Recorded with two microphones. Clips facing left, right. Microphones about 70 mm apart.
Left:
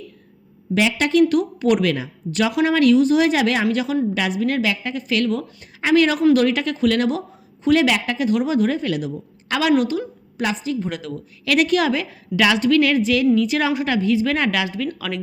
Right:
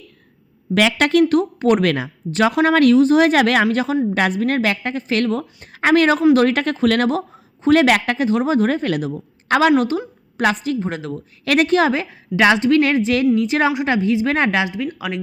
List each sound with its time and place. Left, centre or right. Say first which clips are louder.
0.7 s speech: right 3 dB; right
1.3 s a woman's voice: right 2 dB; right
2.3 s a woman's voice: right 3 dB; right
3.7 s a woman's voice: right 2 dB; right
8.2 s a woman's voice: right 2 dB; right
10.4 s speech: right 4 dB; right
10.8 s a woman's voice: right 2 dB; right